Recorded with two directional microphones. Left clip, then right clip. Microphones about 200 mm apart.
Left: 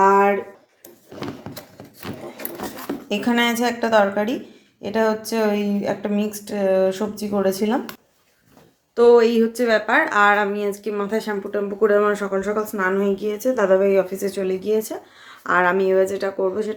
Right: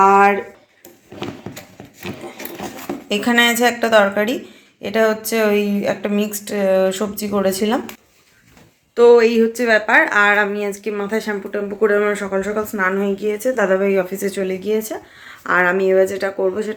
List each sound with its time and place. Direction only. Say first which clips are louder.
0.0 s a sound: right 4 dB; centre (ahead or behind)
3.1 s speech: right 5 dB; centre (ahead or behind)
9.0 s speech: right 3 dB; 5° right (ahead or behind)